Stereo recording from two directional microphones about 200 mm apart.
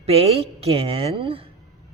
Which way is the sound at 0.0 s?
30° right (ahead or behind).